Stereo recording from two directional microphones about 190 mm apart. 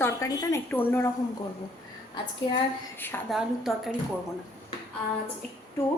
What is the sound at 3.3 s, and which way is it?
Speech, centre (ahead or behind).